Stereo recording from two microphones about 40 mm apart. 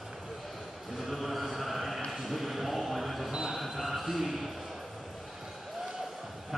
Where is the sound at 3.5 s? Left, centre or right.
Centre.